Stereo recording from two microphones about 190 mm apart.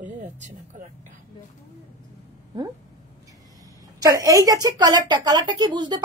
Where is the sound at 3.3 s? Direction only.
20° right (ahead or behind).